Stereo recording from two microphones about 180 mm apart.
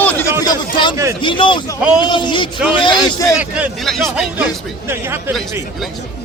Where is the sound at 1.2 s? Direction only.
25° left (ahead or behind).